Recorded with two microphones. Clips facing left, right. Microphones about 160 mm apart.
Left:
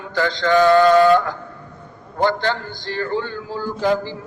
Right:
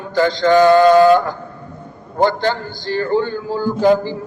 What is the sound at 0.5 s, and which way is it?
Mantra, 20° right (ahead or behind).